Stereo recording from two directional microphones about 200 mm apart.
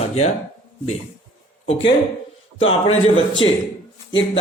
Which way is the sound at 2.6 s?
30° left (ahead or behind).